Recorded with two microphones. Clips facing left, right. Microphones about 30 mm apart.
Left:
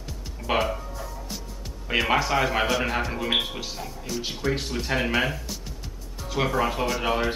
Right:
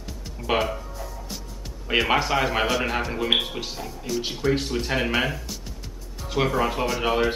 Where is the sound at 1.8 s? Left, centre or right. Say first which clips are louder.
Right 1 dB; centre.